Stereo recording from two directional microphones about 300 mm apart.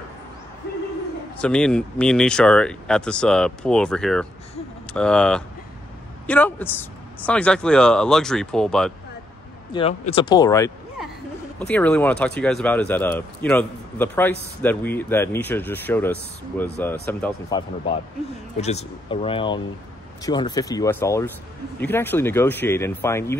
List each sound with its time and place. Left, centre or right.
1.4 s speech: centre
9.7 s speech: centre